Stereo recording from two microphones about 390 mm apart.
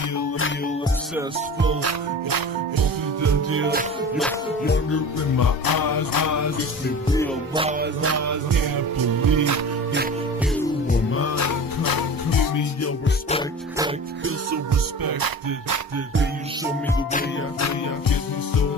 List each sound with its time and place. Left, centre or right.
1.6 s music: right
2.2 s music: right
3.4 s music: right
5.4 s music: left
7.8 s music: right
8.5 s music: right
11.1 s music: left
15.0 s music: right